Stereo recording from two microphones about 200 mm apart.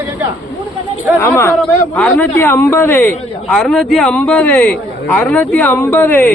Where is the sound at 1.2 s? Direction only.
15° left (ahead or behind).